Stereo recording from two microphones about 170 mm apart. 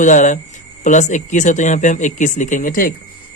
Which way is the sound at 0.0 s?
45° left (ahead or behind).